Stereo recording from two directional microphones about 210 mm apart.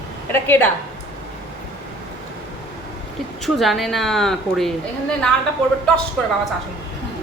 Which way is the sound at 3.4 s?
Centre (ahead or behind).